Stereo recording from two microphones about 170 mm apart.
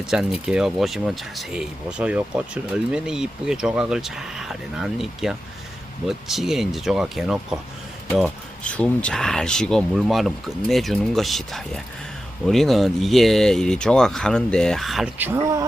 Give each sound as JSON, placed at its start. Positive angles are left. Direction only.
{"t": 0.0, "sound": "speech", "side_deg": -5}
{"t": 15.2, "sound": "speech", "side_deg": -15}